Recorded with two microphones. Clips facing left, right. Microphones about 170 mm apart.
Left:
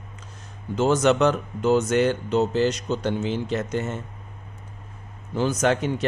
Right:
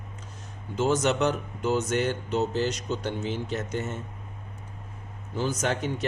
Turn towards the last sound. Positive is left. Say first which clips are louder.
# left 6 dB
turn(degrees=80)